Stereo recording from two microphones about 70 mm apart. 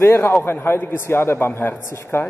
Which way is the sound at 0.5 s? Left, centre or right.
Left.